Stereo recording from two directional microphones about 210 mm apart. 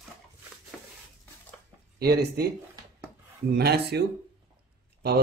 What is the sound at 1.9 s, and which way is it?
Speech, 50° right (ahead or behind).